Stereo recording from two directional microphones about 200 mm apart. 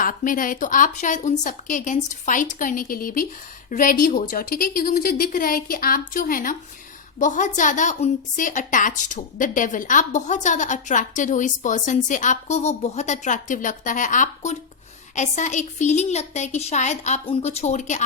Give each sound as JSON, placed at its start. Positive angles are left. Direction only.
{"t": 0.0, "sound": "a woman's voice", "side_deg": 45}